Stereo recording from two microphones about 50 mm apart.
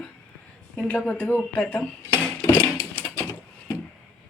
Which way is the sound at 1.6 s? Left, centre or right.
Left.